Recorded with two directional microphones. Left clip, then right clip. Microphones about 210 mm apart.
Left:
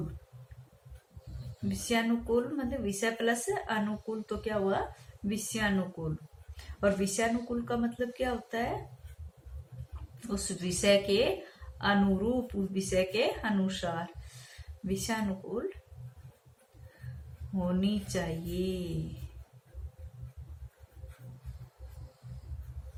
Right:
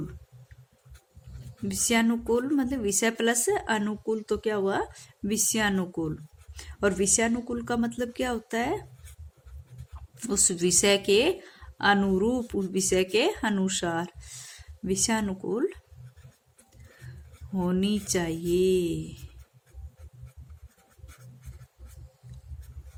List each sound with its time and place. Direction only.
1.6 s a woman's voice: 55° right (ahead or behind)
10.2 s a woman's voice: 55° right (ahead or behind)
17.6 s speech: 55° right (ahead or behind)